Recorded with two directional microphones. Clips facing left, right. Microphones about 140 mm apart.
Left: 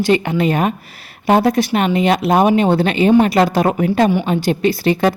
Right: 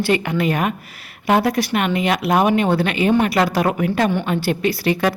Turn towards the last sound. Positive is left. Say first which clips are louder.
# left 4 dB
turn(degrees=30)  # may be behind; listen again after turning